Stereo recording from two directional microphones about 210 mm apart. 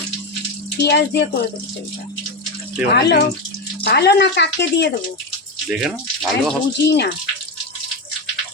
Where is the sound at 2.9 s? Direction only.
50° left (ahead or behind).